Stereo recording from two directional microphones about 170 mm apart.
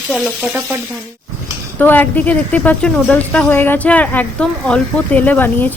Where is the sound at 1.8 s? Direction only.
10° left (ahead or behind).